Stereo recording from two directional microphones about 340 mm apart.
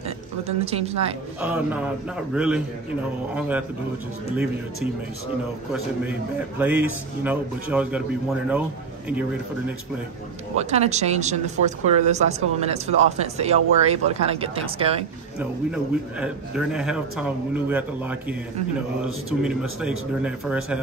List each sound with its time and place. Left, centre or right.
0.5 s speech: centre
1.4 s a man's voice: centre
5.7 s a man's voice: centre
10.5 s speech: centre
15.7 s a man's voice: centre